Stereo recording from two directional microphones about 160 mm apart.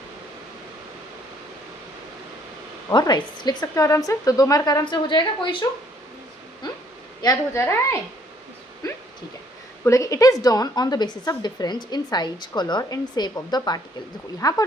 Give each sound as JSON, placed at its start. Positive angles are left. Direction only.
{"t": 2.9, "sound": "a woman's voice", "side_deg": 25}
{"t": 7.2, "sound": "a woman's voice", "side_deg": 20}
{"t": 8.8, "sound": "a sound", "side_deg": 20}
{"t": 9.8, "sound": "a woman's voice", "side_deg": 20}